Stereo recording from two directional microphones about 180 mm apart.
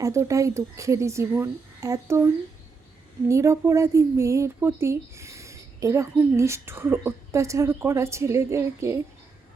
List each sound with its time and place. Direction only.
0.0 s speech: 15° right (ahead or behind)